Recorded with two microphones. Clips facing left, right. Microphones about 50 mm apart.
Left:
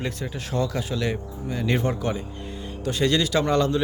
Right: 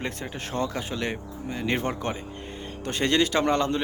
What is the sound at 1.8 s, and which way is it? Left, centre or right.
Speech, right.